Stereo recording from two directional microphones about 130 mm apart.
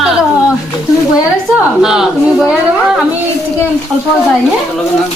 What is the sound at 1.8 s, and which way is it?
Speech, 5° right (ahead or behind).